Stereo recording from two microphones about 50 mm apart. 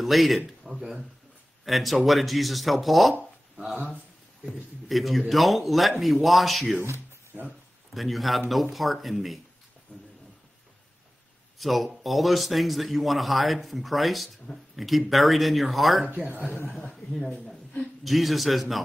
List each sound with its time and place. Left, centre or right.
0.0 s a man's voice: centre
0.7 s a sound: centre
1.6 s a man's voice: centre
3.7 s speech: right
4.8 s a man's voice: centre
7.3 s a sound: right
7.9 s a man's voice: centre
9.9 s a sound: left
11.5 s a man's voice: centre
16.1 s speech: right
16.9 s a man's voice: centre